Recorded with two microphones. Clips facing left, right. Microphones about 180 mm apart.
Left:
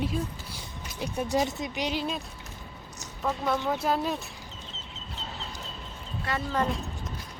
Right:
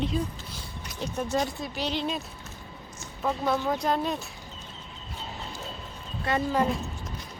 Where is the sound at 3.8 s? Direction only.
5° left (ahead or behind).